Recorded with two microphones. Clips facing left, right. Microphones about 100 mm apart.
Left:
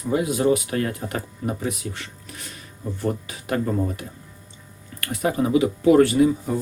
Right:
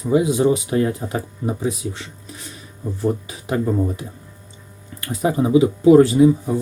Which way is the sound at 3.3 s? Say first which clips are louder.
Right 2 dB; 20° right (ahead or behind).